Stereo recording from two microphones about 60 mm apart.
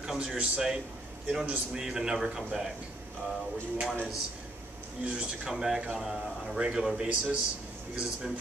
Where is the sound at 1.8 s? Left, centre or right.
Centre.